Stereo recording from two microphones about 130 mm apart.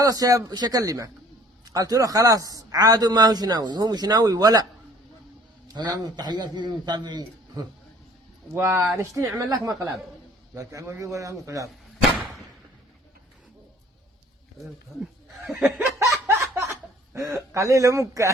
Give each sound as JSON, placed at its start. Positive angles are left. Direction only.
{"t": 0.0, "sound": "a man's voice", "side_deg": -25}
{"t": 5.6, "sound": "a man's voice", "side_deg": -30}
{"t": 8.5, "sound": "a man's voice", "side_deg": -20}
{"t": 15.4, "sound": "snicker", "side_deg": 0}
{"t": 15.8, "sound": "a sound", "side_deg": -20}
{"t": 17.2, "sound": "a man's voice", "side_deg": -25}